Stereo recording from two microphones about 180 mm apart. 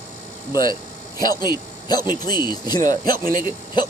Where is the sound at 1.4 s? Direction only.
20° left (ahead or behind).